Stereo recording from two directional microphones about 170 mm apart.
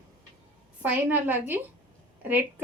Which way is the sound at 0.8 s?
10° right (ahead or behind).